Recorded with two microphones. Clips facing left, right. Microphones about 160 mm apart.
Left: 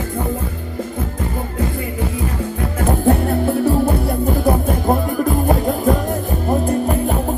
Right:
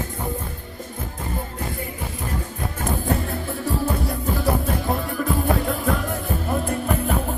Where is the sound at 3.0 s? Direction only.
60° left (ahead or behind); by 7.1 s 40° left (ahead or behind).